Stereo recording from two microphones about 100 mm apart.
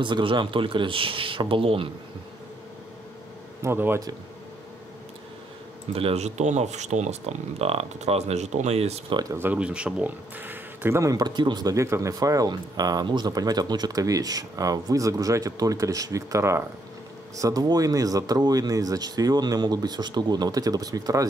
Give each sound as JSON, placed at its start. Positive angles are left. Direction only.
{"t": 0.0, "sound": "a man's voice", "side_deg": -55}
{"t": 3.6, "sound": "speech", "side_deg": -25}
{"t": 5.9, "sound": "speech", "side_deg": -85}
{"t": 9.1, "sound": "speech", "side_deg": -40}
{"t": 9.4, "sound": "speech", "side_deg": -15}
{"t": 11.0, "sound": "speech", "side_deg": -35}